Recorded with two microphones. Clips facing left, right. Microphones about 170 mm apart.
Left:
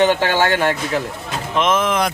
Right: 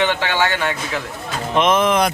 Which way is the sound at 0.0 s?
40° left (ahead or behind).